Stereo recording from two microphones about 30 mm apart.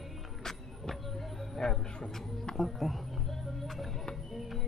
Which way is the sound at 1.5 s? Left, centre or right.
Centre.